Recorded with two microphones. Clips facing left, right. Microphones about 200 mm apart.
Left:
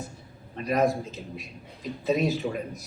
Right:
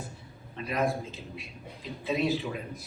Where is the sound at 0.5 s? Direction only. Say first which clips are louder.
Left 5 dB; 40° left (ahead or behind).